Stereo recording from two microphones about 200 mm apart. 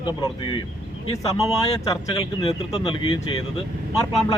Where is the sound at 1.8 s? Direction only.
20° left (ahead or behind).